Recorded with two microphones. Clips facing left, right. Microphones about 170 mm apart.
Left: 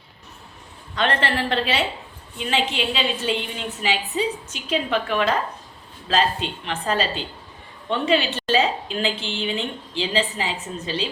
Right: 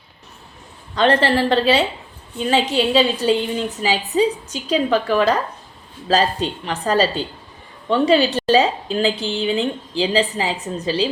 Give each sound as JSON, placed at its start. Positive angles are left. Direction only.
{"t": 0.9, "sound": "a woman's voice", "side_deg": -35}